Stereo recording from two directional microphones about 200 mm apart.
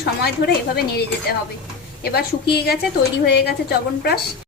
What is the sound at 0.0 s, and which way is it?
Speech, 55° left (ahead or behind).